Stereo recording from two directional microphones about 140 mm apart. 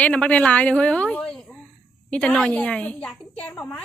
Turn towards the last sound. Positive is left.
turn(degrees=10)  # may be behind; listen again after turning